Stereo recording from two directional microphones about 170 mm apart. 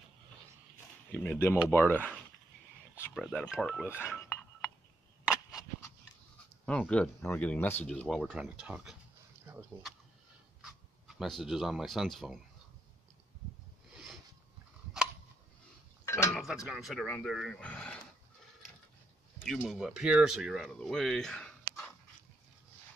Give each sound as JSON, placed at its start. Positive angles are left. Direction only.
{"t": 1.1, "sound": "speech", "side_deg": 10}
{"t": 3.2, "sound": "speech", "side_deg": 0}
{"t": 3.8, "sound": "speech", "side_deg": 15}
{"t": 5.3, "sound": "a sound", "side_deg": -5}
{"t": 6.6, "sound": "speech", "side_deg": 5}
{"t": 11.1, "sound": "speech", "side_deg": 0}
{"t": 16.1, "sound": "a sound", "side_deg": 15}
{"t": 16.3, "sound": "speech", "side_deg": 0}
{"t": 19.4, "sound": "speech", "side_deg": 0}